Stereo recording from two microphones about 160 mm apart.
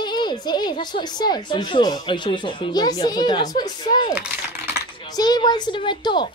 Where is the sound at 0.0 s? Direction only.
30° left (ahead or behind).